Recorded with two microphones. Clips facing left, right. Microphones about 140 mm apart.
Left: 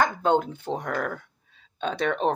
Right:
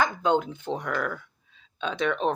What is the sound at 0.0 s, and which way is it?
Speech, 50° left (ahead or behind).